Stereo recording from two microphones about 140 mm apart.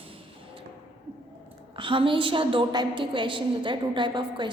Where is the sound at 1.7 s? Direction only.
35° right (ahead or behind).